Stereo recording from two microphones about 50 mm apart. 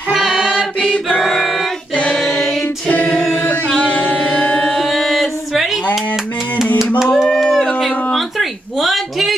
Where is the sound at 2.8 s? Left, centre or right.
Left.